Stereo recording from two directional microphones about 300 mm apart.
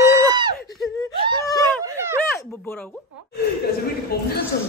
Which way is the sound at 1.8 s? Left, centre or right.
Centre.